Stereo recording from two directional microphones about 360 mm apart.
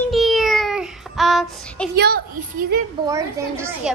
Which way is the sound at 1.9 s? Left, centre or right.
Right.